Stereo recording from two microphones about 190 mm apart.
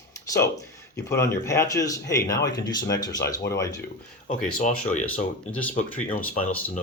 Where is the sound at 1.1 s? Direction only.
15° left (ahead or behind).